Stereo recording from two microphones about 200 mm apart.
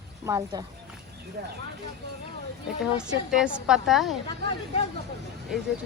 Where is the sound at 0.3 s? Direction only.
15° right (ahead or behind).